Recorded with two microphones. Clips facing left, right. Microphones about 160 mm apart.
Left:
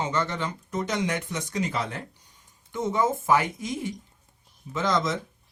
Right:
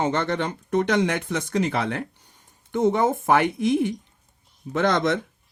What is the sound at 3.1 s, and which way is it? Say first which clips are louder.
Speech: right 3 dB; 70° right (ahead or behind).